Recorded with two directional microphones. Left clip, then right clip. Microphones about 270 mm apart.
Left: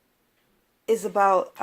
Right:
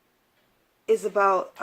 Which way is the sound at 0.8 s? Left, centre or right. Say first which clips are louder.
Left 1 dB; left.